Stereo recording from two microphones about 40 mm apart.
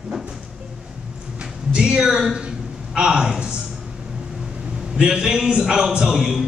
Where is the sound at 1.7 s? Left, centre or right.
Centre.